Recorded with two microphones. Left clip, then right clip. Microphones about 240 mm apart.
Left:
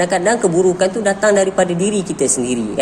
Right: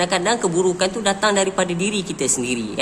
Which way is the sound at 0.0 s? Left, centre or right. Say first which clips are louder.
Left 4 dB; centre.